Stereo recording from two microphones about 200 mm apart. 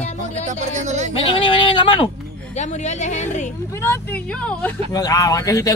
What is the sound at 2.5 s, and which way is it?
Speech, 35° left (ahead or behind).